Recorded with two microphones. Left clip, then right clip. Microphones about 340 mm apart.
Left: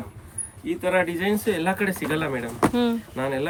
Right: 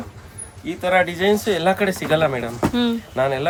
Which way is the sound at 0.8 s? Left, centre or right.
Centre.